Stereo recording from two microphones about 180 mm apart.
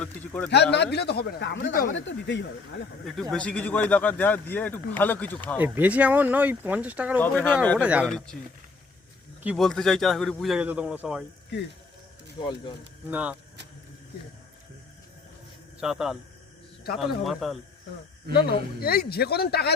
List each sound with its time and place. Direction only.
0.0 s a sound: 5° left (ahead or behind)
0.5 s a man's voice: 70° left (ahead or behind)
1.6 s speech: 50° left (ahead or behind)
2.0 s speech: 90° left
3.3 s speech: 5° left (ahead or behind)
5.5 s speech: 10° right (ahead or behind)
7.2 s speech: 10° left (ahead or behind)
7.8 s speech: 5° right (ahead or behind)
8.0 s a man's voice: 5° left (ahead or behind)
9.4 s a man's voice: 5° right (ahead or behind)
12.4 s speech: 25° left (ahead or behind)
13.1 s speech: 10° right (ahead or behind)
15.8 s a man's voice: 5° right (ahead or behind)
18.8 s speech: 60° left (ahead or behind)